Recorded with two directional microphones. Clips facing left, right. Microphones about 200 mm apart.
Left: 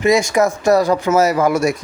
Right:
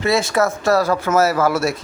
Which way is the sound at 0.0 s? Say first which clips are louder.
Left 3 dB; 15° left (ahead or behind).